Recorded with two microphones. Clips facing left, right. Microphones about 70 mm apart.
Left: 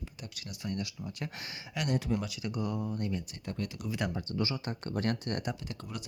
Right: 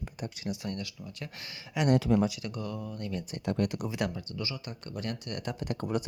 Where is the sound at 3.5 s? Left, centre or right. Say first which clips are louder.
Right 8 dB; right.